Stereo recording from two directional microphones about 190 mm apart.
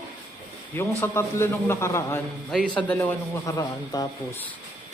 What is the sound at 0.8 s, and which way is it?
A man's voice, 10° left (ahead or behind).